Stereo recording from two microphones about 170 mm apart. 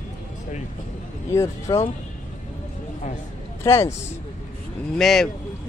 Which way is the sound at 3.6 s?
15° left (ahead or behind).